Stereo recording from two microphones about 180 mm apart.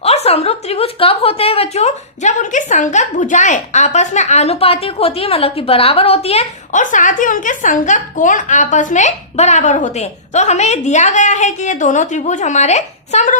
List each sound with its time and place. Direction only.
0.0 s a woman's voice: 35° left (ahead or behind)